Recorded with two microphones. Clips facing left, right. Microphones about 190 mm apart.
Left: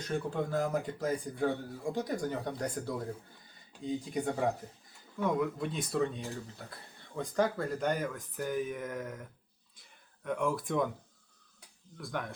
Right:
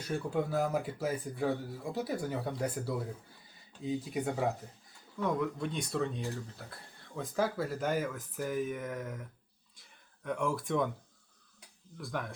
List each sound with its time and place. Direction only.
0.0 s speech: 10° right (ahead or behind)
10.2 s speech: centre (ahead or behind)
11.9 s speech: centre (ahead or behind)